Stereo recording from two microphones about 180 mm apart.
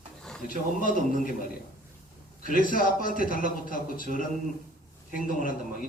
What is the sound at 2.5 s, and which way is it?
A man's voice, 50° left (ahead or behind).